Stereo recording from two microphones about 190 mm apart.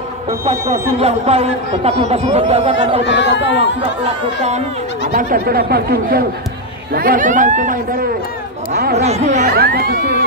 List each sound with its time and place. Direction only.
1.0 s speech: 35° right (ahead or behind)
3.1 s speech: 70° left (ahead or behind)
5.1 s speech: 50° right (ahead or behind)
8.9 s speech: 35° right (ahead or behind)
9.5 s speech: 55° right (ahead or behind)